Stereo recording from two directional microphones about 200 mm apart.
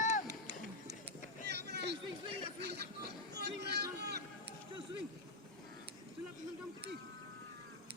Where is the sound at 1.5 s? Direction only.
55° right (ahead or behind).